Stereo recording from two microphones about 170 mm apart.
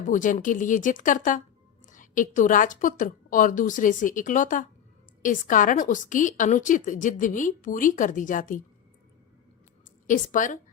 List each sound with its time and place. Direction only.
0.1 s a woman's voice: 50° left (ahead or behind)
10.1 s a woman's voice: 50° left (ahead or behind)